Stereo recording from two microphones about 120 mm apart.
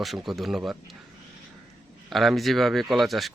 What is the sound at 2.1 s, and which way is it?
Speech, centre (ahead or behind).